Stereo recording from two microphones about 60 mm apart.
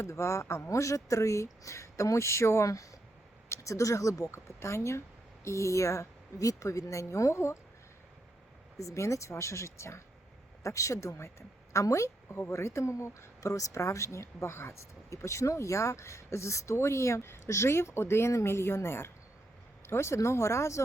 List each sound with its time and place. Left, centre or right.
0.0 s speech: left
8.8 s a woman's voice: left